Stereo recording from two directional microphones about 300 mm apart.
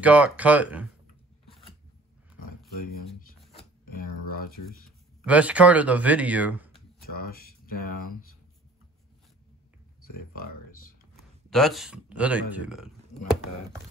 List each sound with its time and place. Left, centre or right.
0.0 s speech: centre
3.2 s a sound: left
4.4 s speech: left
5.2 s speech: centre
7.0 s speech: left
10.1 s a sound: left
11.5 s speech: centre